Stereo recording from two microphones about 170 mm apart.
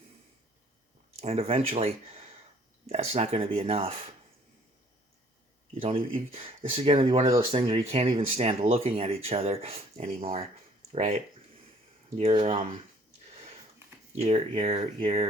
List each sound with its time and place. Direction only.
1.2 s speech: 35° right (ahead or behind)
5.8 s speech: 35° right (ahead or behind)
14.2 s speech: 35° right (ahead or behind)